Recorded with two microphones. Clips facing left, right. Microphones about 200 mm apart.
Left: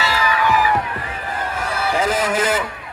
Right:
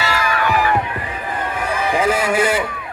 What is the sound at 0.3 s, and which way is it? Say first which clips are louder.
Music: left 1 dB; 50° right (ahead or behind).